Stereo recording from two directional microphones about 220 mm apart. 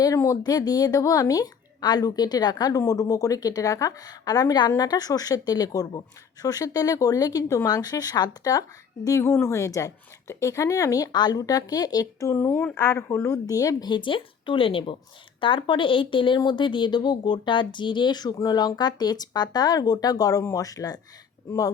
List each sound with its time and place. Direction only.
0.0 s speech: 15° left (ahead or behind)